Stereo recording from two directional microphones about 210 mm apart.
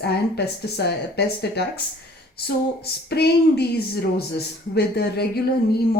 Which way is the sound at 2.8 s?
50° left (ahead or behind).